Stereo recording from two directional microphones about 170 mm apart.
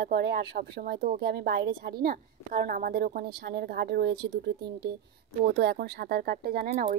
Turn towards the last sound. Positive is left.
turn(degrees=-65)  # may be behind; listen again after turning